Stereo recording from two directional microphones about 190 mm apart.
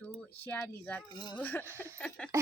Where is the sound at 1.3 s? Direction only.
10° left (ahead or behind).